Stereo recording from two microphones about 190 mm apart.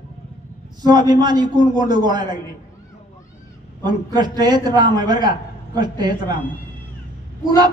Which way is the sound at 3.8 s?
20° right (ahead or behind).